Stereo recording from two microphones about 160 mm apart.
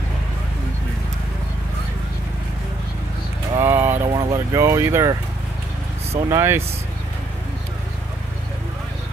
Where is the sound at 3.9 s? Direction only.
35° right (ahead or behind).